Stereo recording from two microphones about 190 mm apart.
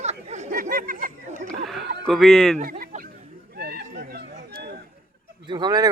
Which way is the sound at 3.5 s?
60° right (ahead or behind).